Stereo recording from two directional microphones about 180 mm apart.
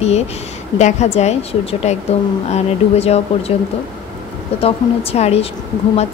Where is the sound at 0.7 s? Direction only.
40° left (ahead or behind).